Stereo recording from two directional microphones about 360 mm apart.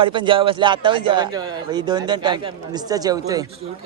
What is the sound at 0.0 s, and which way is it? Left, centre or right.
A man's voice, centre.